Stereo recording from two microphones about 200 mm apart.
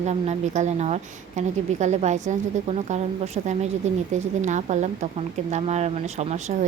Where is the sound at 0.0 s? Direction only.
35° right (ahead or behind).